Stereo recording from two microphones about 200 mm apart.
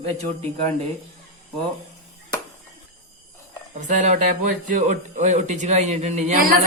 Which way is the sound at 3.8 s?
40° right (ahead or behind).